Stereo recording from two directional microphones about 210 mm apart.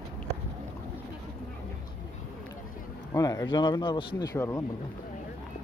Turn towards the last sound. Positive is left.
turn(degrees=10)  # may be behind; listen again after turning